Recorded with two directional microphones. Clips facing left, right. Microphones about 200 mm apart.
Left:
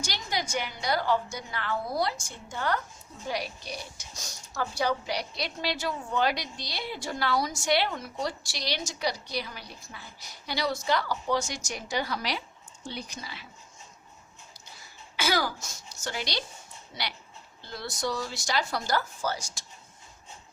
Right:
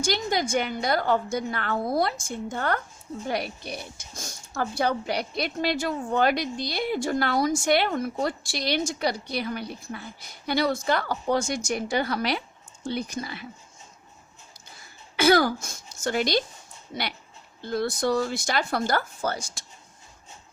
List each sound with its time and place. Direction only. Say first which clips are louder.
0.0 s speech: right 8 dB; 50° right (ahead or behind)
15.1 s speech: right 9 dB; 55° right (ahead or behind)